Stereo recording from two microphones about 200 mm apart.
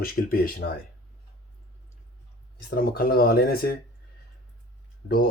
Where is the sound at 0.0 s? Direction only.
45° left (ahead or behind).